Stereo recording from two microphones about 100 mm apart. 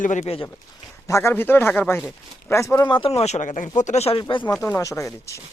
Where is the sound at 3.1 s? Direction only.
90° left.